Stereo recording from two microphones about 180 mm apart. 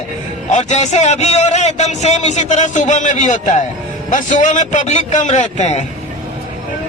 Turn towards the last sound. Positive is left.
turn(degrees=40)  # may be behind; listen again after turning